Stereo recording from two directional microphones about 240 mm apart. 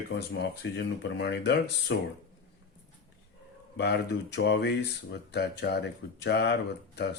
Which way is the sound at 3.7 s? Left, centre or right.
Left.